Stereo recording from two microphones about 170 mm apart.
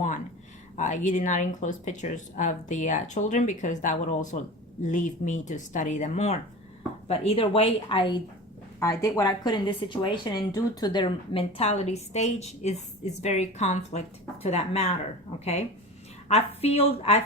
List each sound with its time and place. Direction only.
0.8 s speech: 45° left (ahead or behind); by 8.2 s 30° left (ahead or behind)
8.8 s speech: 15° left (ahead or behind); by 14.9 s 40° left (ahead or behind)
16.3 s speech: 35° left (ahead or behind)